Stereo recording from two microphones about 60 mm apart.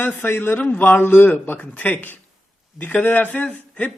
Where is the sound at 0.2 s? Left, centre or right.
Left.